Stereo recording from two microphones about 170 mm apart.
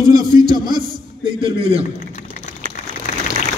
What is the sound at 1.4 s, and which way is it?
Speech, 35° right (ahead or behind).